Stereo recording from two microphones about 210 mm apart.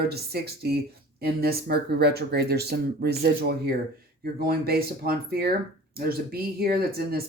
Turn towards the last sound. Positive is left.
turn(degrees=-45)  # may be behind; listen again after turning